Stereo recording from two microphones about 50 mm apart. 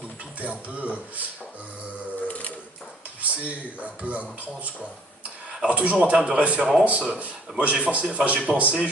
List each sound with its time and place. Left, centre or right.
0.3 s speech: right
3.2 s speech: right